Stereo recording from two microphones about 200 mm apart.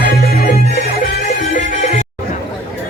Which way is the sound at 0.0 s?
50° left (ahead or behind).